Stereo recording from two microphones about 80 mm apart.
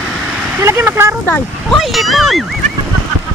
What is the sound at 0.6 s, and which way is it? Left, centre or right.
Speech, right.